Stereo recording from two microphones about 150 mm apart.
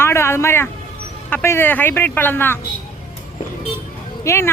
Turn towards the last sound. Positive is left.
turn(degrees=20)  # may be behind; listen again after turning